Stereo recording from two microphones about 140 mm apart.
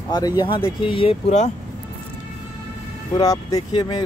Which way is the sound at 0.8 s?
40° left (ahead or behind).